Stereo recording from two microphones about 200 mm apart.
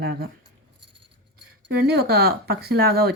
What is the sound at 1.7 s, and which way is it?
Speech, 55° right (ahead or behind).